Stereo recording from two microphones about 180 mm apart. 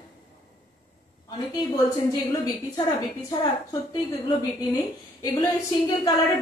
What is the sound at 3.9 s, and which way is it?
A woman's voice, 25° left (ahead or behind).